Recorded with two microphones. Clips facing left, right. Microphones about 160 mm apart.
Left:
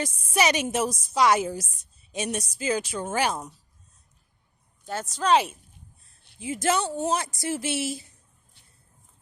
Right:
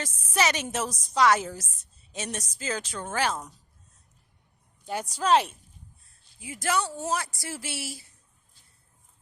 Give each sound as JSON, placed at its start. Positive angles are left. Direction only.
{"t": 0.0, "sound": "speech", "side_deg": 15}
{"t": 4.9, "sound": "speech", "side_deg": -10}
{"t": 5.3, "sound": "speech", "side_deg": 0}
{"t": 6.4, "sound": "a woman's voice", "side_deg": 25}